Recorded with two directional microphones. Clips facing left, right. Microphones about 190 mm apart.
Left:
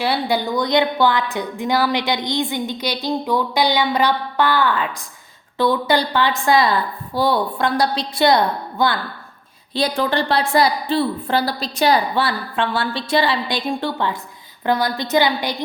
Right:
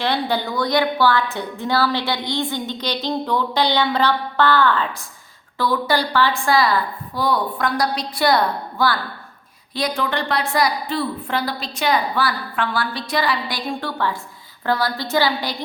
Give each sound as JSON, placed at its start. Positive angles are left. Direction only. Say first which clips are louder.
{"t": 0.0, "sound": "a woman's voice", "louder": "left 2 dB", "side_deg": 10}
{"t": 5.5, "sound": "a woman's voice", "louder": "left 3 dB", "side_deg": 20}
{"t": 9.7, "sound": "a woman's voice", "louder": "left 3 dB", "side_deg": 30}